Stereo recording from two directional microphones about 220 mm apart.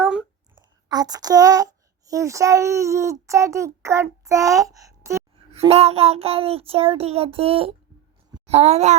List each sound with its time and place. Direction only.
0.0 s a sound: 5° right (ahead or behind)
0.5 s a child's voice: 20° right (ahead or behind)
5.5 s a child's voice: 30° right (ahead or behind)